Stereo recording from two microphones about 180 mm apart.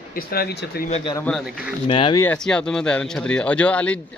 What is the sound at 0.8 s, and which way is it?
Speech, 35° left (ahead or behind).